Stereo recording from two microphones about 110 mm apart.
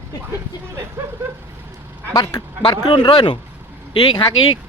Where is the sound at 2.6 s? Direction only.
45° left (ahead or behind).